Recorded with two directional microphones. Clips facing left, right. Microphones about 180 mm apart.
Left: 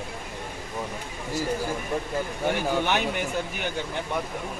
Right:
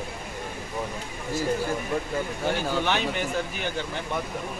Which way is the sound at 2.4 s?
15° left (ahead or behind).